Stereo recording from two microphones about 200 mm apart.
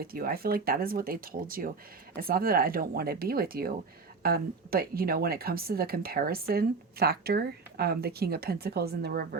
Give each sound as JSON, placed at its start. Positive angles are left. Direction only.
{"t": 0.0, "sound": "speech", "side_deg": -45}